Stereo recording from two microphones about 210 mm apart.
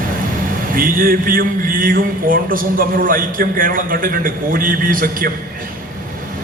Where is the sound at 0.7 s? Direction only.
45° right (ahead or behind).